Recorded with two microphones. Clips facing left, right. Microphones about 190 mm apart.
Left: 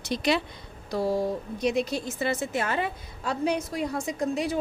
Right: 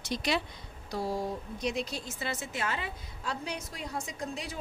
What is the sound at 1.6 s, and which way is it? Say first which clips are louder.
A woman's voice: left 8 dB; 60° left (ahead or behind).